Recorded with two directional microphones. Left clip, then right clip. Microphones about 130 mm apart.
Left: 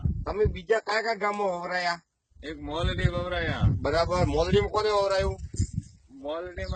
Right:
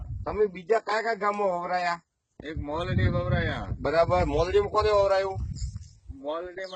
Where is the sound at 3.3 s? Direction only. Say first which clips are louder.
Left 1 dB; 55° left (ahead or behind).